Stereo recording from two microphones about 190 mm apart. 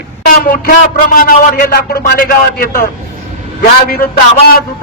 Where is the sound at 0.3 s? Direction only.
50° left (ahead or behind).